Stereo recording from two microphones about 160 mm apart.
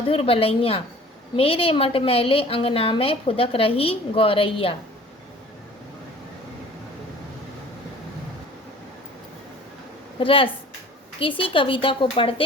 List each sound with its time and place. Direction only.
0.1 s a woman's voice: 35° left (ahead or behind)
10.2 s a woman's voice: 35° left (ahead or behind)